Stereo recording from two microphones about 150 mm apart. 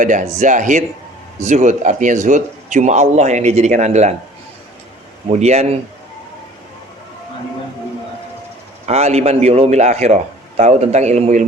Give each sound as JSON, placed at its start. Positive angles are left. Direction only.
{"t": 0.0, "sound": "speech", "side_deg": -60}
{"t": 5.3, "sound": "speech", "side_deg": -45}
{"t": 8.9, "sound": "speech", "side_deg": -45}